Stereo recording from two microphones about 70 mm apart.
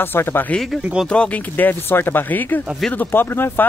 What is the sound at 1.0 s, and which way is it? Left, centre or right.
Speech, centre.